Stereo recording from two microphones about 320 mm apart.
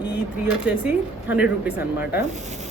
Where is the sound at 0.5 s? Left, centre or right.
Centre.